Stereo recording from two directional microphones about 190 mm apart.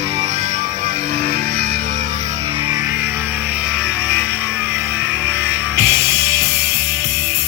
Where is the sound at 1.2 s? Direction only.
50° right (ahead or behind).